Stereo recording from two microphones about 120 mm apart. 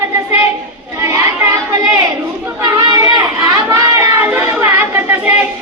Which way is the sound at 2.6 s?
35° right (ahead or behind).